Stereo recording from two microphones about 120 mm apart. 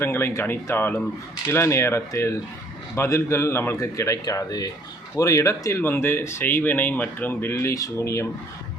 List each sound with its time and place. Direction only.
0.0 s speech: 20° left (ahead or behind)